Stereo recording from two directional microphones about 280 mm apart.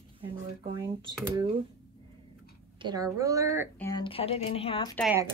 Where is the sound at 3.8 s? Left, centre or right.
Centre.